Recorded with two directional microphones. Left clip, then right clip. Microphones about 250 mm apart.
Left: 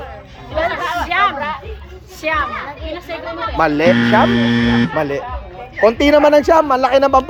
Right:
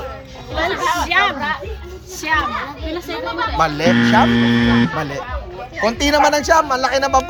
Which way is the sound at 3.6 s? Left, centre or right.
Left.